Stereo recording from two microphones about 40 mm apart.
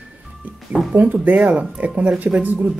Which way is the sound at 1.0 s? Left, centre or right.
Right.